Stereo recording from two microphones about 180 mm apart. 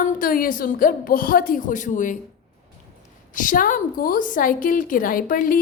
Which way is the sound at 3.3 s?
45° left (ahead or behind).